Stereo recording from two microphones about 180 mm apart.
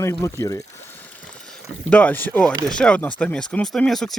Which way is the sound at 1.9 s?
10° left (ahead or behind).